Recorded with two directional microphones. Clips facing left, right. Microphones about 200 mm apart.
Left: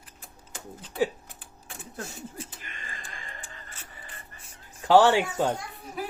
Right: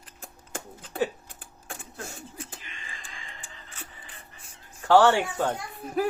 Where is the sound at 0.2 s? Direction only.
50° right (ahead or behind).